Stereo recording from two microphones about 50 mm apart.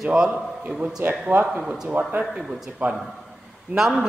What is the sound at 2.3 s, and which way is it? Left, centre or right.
Speech, centre.